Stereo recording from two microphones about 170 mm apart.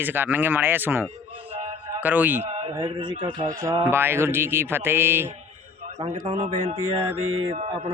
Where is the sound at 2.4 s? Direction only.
40° right (ahead or behind).